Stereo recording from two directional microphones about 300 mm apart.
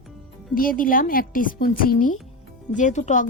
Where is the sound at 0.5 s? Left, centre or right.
Left.